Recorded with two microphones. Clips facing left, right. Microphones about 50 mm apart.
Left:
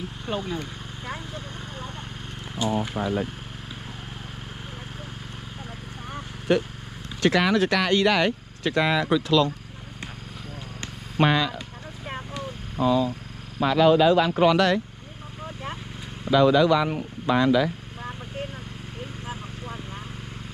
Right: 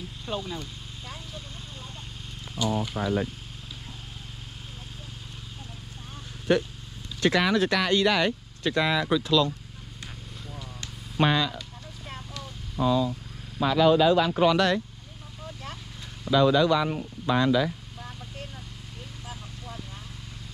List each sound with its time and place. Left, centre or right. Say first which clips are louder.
0.3 s a sound: left 3 dB; left
2.5 s speech: left 2 dB; left
7.2 s speech: left 2 dB; left
11.1 s speech: left 2 dB; left
12.7 s speech: left 2 dB; left
16.3 s speech: left 3 dB; left
19.2 s a sound: left 5 dB; left